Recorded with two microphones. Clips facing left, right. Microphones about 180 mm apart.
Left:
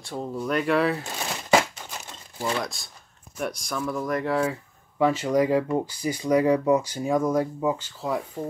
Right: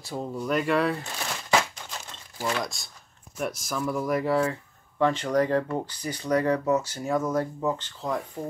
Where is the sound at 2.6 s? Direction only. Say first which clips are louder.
Left 1 dB; centre (ahead or behind).